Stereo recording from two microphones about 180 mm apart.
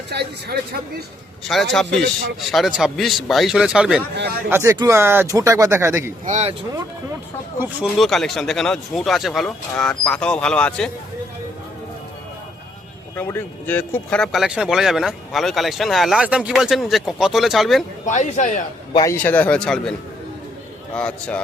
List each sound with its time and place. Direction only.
0.1 s speech: 65° right (ahead or behind)
1.5 s speech: centre (ahead or behind); by 6.1 s 15° right (ahead or behind)
6.2 s speech: 40° right (ahead or behind)
7.9 s speech: centre (ahead or behind)
13.1 s speech: 10° left (ahead or behind)
18.0 s speech: 40° left (ahead or behind)
18.9 s a man's voice: 15° left (ahead or behind)
20.9 s a man's voice: 5° left (ahead or behind)